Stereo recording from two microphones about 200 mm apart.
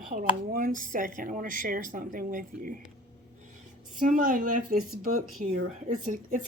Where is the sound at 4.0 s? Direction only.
40° right (ahead or behind).